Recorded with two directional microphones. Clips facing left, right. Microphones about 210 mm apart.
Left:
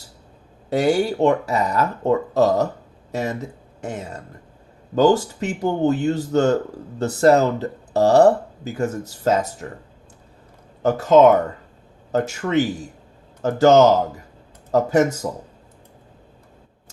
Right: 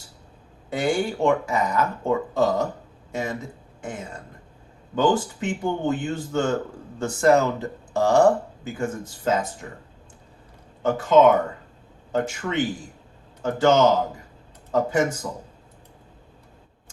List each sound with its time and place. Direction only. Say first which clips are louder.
0.7 s speech: left 5 dB; 40° left (ahead or behind)
10.8 s speech: left 3 dB; 40° left (ahead or behind)